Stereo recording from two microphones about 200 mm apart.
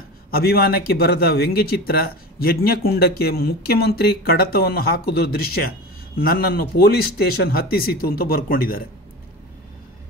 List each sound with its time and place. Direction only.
0.3 s a man's voice: 50° left (ahead or behind)